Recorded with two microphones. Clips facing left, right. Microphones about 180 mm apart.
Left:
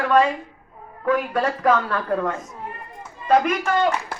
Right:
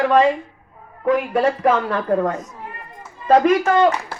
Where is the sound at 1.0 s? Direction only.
20° right (ahead or behind).